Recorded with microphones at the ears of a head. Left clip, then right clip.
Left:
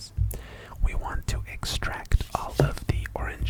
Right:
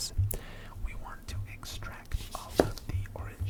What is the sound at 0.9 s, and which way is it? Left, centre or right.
Speech, left.